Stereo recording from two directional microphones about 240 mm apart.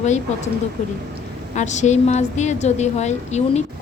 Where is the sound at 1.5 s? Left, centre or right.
Left.